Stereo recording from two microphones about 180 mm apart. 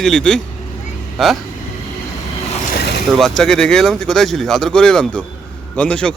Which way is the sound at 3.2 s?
5° left (ahead or behind).